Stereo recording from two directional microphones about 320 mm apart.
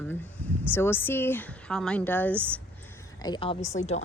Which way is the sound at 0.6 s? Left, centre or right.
Centre.